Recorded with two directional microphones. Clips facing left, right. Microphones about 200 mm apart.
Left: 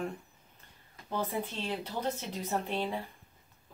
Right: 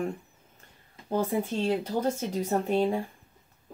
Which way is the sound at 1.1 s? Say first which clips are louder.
Right 7 dB; 45° right (ahead or behind).